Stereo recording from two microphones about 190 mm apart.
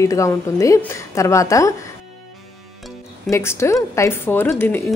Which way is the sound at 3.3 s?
15° left (ahead or behind).